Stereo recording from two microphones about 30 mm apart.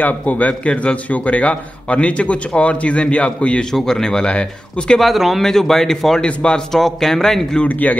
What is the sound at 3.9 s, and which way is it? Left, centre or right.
Speech, centre.